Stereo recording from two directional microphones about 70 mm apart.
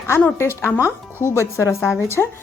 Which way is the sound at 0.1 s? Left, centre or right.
Left.